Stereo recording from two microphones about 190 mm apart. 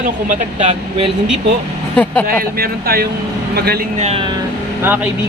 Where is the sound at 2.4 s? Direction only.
55° right (ahead or behind).